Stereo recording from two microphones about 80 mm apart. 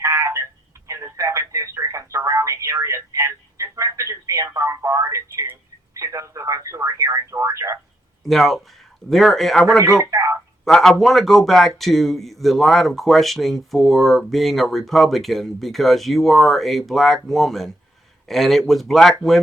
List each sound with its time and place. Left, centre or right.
0.0 s telephone: right
4.4 s speech: right
8.2 s speech: centre
9.7 s speech: right
10.7 s speech: centre